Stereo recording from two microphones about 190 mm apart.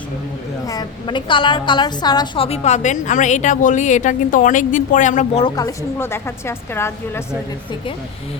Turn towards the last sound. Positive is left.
turn(degrees=15)  # may be behind; listen again after turning